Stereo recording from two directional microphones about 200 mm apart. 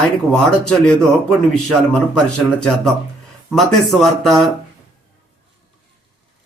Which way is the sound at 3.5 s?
Centre (ahead or behind).